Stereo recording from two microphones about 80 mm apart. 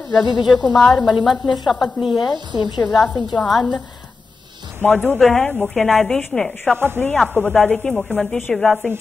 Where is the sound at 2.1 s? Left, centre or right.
Left.